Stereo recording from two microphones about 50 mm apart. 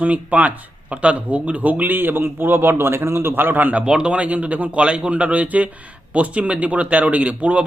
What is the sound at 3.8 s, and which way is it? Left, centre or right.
Speech, centre.